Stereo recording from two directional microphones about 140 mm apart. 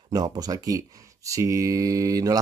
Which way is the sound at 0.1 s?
25° right (ahead or behind).